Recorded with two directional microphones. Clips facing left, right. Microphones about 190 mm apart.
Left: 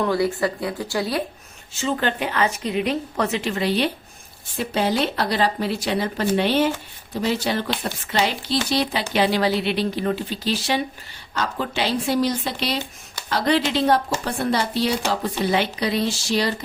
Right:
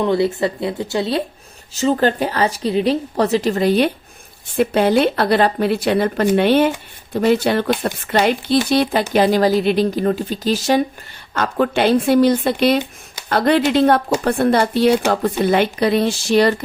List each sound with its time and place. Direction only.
0.0 s speech: 25° right (ahead or behind)
1.7 s a woman's voice: 40° right (ahead or behind)
11.3 s speech: 60° right (ahead or behind)